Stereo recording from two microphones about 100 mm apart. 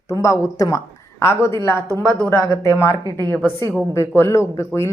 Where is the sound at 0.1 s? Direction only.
30° left (ahead or behind).